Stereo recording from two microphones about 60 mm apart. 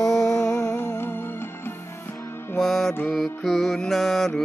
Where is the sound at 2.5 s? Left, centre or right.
Centre.